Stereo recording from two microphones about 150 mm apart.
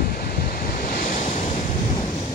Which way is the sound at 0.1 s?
80° left.